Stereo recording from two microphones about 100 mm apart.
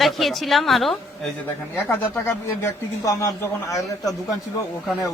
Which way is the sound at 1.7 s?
20° left (ahead or behind).